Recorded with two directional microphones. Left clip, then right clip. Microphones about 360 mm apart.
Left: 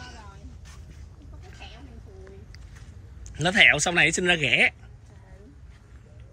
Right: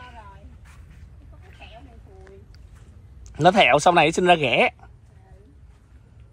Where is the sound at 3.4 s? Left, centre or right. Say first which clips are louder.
Right 3 dB; centre.